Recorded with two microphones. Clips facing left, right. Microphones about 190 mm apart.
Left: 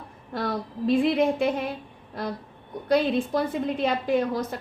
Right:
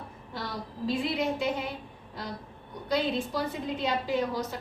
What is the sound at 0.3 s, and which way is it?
A woman's voice, 55° left (ahead or behind).